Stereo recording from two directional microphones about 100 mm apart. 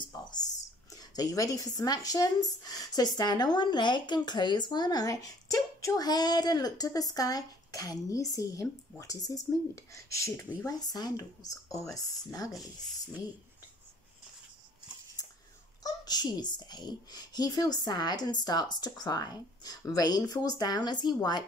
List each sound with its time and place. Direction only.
0.1 s a sound: 45° left (ahead or behind)
0.9 s speech: 40° left (ahead or behind)
10.6 s speech: 40° left (ahead or behind)
15.8 s a child's voice: 40° left (ahead or behind)